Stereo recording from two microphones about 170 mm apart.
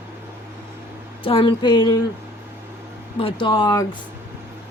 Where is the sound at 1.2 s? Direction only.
30° left (ahead or behind).